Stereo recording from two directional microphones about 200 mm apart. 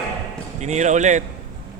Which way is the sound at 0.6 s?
35° right (ahead or behind).